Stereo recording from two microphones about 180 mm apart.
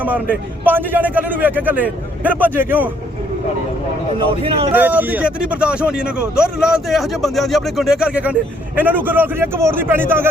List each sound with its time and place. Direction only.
0.0 s speech: 10° right (ahead or behind)
4.4 s speech: 30° right (ahead or behind)
4.7 s speech: 10° right (ahead or behind)